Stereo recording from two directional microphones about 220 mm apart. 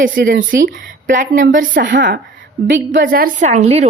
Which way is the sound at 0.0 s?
40° right (ahead or behind).